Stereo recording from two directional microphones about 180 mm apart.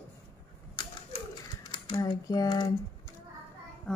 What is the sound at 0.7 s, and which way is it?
Typewriter, 30° left (ahead or behind).